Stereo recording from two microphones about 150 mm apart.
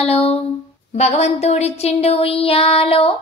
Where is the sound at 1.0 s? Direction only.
45° left (ahead or behind).